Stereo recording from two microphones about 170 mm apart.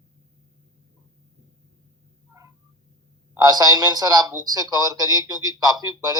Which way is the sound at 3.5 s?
20° right (ahead or behind).